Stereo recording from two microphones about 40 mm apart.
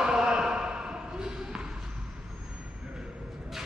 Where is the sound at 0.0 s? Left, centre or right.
Centre.